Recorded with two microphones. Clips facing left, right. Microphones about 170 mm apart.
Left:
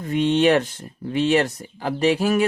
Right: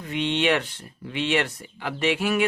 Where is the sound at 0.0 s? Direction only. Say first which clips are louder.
Left 7 dB; 40° left (ahead or behind).